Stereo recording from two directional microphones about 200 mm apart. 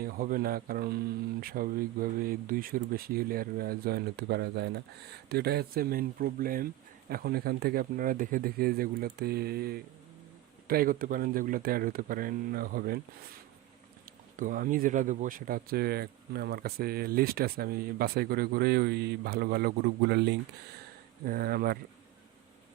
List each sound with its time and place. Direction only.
0.0 s speech: 45° right (ahead or behind)
14.3 s speech: 45° right (ahead or behind)